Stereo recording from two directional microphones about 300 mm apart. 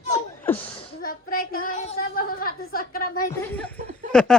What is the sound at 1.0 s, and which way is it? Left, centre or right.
A woman's voice, left.